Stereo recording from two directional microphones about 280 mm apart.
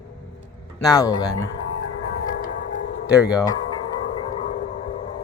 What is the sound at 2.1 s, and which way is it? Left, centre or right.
Music, left.